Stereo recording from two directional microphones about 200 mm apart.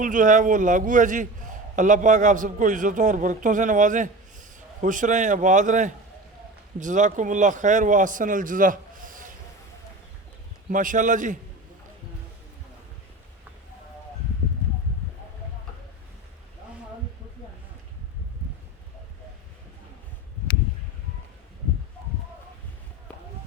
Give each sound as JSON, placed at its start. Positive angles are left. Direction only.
{"t": 0.0, "sound": "a man's voice", "side_deg": -40}
{"t": 10.7, "sound": "a man's voice", "side_deg": -40}